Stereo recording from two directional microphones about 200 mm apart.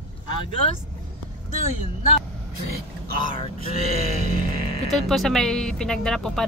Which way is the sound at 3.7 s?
35° right (ahead or behind).